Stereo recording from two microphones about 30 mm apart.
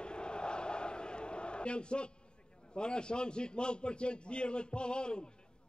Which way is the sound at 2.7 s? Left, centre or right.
Left.